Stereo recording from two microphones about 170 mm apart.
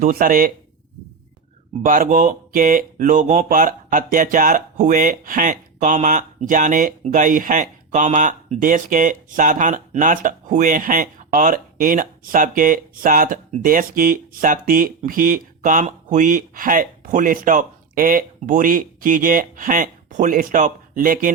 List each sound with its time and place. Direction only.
0.0 s speech: 60° right (ahead or behind)
1.8 s speech: 55° right (ahead or behind)